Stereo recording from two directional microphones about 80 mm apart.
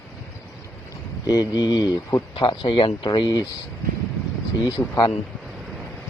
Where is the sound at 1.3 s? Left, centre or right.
Left.